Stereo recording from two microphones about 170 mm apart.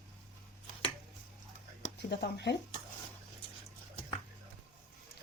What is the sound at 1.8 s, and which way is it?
Speech, 85° left.